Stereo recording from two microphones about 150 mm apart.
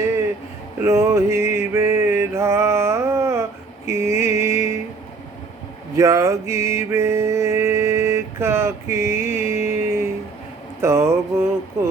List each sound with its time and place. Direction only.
0.8 s mantra: 20° right (ahead or behind)
6.0 s mantra: 20° right (ahead or behind)
10.8 s a sound: 20° right (ahead or behind)